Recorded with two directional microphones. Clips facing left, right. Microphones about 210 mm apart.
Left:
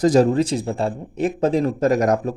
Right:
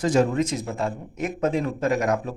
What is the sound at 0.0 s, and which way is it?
Speech, 35° left (ahead or behind).